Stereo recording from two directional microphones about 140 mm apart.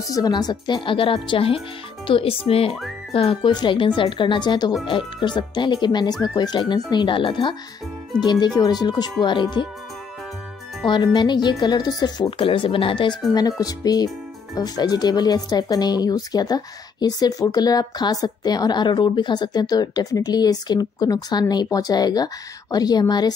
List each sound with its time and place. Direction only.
0.0 s speech: 25° left (ahead or behind)
10.9 s speech: 35° left (ahead or behind)